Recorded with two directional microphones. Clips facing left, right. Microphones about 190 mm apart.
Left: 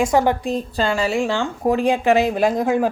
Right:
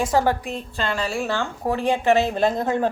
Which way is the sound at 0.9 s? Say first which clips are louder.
Left 3 dB; 10° left (ahead or behind).